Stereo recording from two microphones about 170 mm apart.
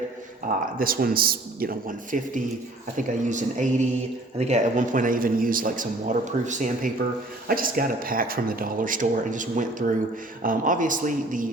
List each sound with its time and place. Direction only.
0.8 s a man's voice: 55° right (ahead or behind)